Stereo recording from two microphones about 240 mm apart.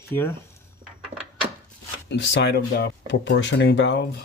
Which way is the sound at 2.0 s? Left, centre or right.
Left.